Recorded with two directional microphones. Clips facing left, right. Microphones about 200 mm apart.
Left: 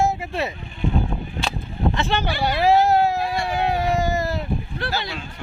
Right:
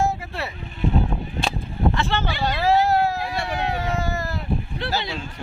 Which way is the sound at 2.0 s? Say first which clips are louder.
Left 1 dB; 15° left (ahead or behind).